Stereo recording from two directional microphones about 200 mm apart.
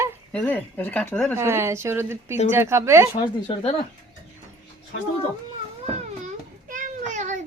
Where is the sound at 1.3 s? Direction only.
15° right (ahead or behind).